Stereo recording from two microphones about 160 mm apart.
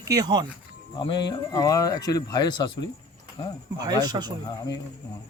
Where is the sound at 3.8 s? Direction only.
25° right (ahead or behind).